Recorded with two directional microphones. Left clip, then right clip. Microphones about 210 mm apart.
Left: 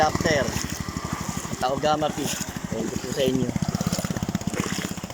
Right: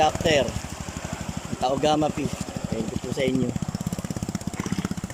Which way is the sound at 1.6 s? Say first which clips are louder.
Right 1 dB; 15° right (ahead or behind).